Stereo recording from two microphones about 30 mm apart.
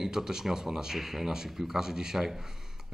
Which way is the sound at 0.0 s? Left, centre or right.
Centre.